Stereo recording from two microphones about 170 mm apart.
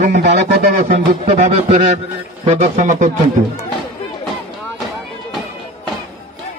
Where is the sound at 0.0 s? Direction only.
45° right (ahead or behind).